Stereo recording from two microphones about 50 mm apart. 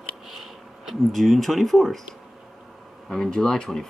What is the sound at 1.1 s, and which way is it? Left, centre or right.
Speech, centre.